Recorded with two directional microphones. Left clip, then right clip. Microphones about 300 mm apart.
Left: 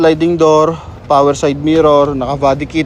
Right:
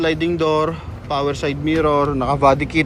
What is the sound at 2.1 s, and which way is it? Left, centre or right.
Speech, centre.